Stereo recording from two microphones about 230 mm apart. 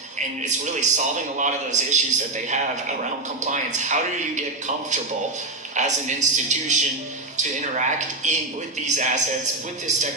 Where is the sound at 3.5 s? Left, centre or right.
Right.